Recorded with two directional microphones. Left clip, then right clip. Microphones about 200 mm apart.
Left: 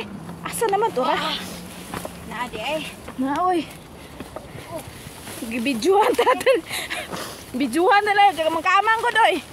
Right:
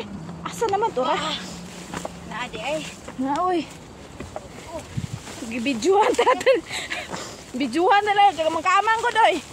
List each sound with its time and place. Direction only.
0.0 s vehicle: 30° left (ahead or behind)
0.7 s speech: 30° left (ahead or behind)
2.3 s speech: 20° left (ahead or behind)
5.5 s speech: 15° left (ahead or behind)